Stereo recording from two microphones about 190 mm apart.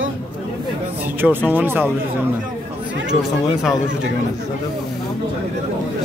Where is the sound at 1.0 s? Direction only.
10° right (ahead or behind).